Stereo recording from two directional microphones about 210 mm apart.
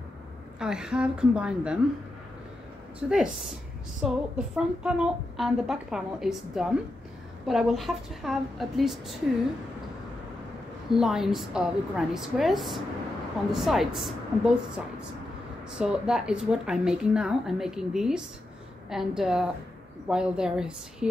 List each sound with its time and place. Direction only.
0.6 s a woman's voice: 5° right (ahead or behind)
3.1 s a woman's voice: centre (ahead or behind)
10.9 s a woman's voice: centre (ahead or behind)